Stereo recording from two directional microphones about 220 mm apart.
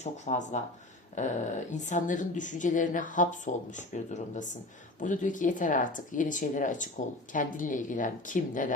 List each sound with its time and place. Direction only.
0.0 s speech: 35° left (ahead or behind)